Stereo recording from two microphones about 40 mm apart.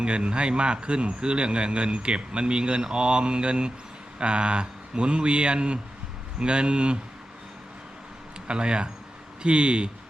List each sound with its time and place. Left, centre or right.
0.0 s speech: right
8.4 s speech: right